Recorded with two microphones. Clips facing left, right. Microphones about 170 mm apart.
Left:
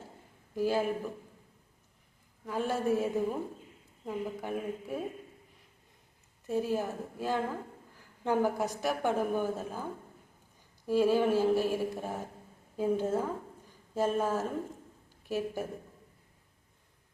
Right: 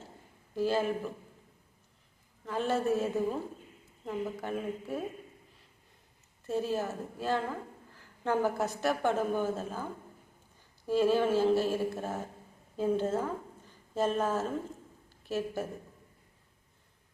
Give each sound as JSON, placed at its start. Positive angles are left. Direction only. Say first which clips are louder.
{"t": 0.5, "sound": "a woman's voice", "louder": "even", "side_deg": 10}
{"t": 2.5, "sound": "a woman's voice", "louder": "right 1 dB", "side_deg": 10}
{"t": 6.5, "sound": "a woman's voice", "louder": "left 1 dB", "side_deg": 15}
{"t": 10.8, "sound": "a woman's voice", "louder": "even", "side_deg": 10}